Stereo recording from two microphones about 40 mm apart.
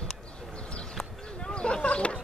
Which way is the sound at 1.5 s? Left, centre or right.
Left.